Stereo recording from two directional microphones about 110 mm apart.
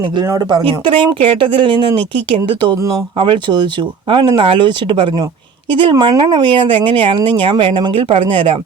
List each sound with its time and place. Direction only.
0.3 s speech: 35° right (ahead or behind)
0.6 s speech: 50° right (ahead or behind)